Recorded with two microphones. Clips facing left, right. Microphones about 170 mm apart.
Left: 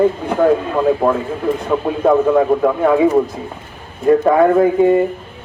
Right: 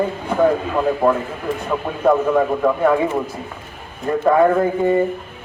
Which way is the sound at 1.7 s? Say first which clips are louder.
Left 3 dB; 5° left (ahead or behind).